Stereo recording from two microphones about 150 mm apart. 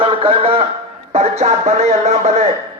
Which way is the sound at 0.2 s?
40° right (ahead or behind).